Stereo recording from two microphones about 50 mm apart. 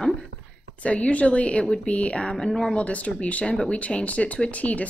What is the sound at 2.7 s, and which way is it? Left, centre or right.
A woman's voice, left.